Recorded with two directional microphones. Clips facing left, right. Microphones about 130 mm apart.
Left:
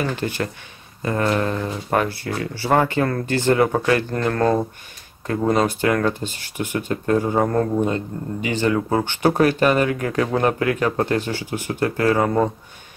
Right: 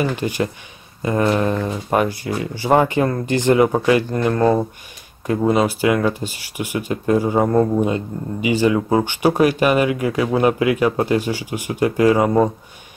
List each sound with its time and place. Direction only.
0.0 s speech: 15° right (ahead or behind)